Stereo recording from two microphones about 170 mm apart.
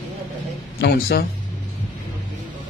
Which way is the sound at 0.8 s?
65° left (ahead or behind).